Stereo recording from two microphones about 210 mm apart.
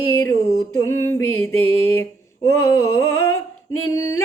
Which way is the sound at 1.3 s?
80° left.